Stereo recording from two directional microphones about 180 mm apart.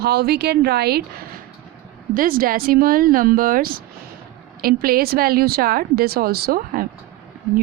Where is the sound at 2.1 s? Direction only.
50° right (ahead or behind).